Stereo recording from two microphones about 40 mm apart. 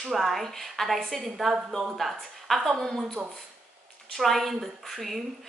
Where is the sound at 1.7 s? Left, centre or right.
Centre.